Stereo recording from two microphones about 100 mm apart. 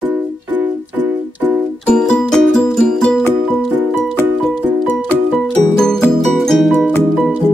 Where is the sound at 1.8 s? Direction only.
5° left (ahead or behind).